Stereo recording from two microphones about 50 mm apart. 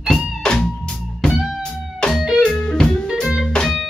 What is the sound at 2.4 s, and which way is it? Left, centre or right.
Music, centre.